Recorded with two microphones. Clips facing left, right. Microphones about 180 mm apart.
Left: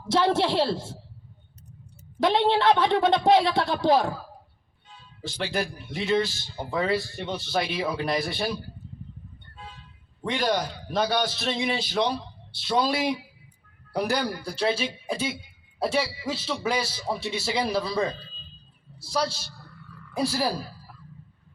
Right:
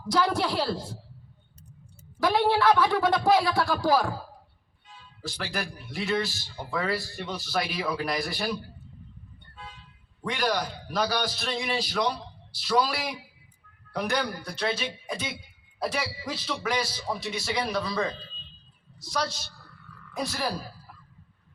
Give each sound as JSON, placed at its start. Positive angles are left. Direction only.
{"t": 0.0, "sound": "a man's voice", "side_deg": 25}
{"t": 2.2, "sound": "a man's voice", "side_deg": 25}
{"t": 5.2, "sound": "a man's voice", "side_deg": 25}
{"t": 10.2, "sound": "a man's voice", "side_deg": 25}
{"t": 18.9, "sound": "a man's voice", "side_deg": 30}